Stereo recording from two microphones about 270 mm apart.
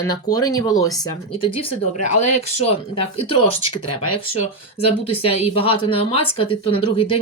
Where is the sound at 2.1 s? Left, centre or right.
Left.